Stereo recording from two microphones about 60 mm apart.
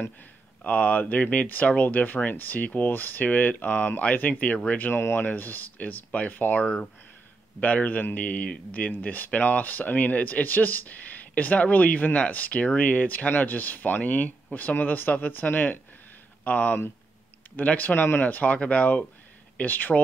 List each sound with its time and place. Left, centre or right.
0.7 s speech: left